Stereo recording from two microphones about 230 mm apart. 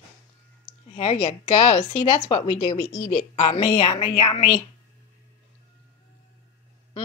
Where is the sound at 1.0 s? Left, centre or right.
Left.